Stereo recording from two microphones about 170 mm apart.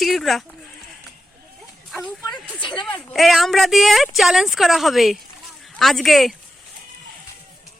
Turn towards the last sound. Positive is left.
turn(degrees=0)  # may be behind; listen again after turning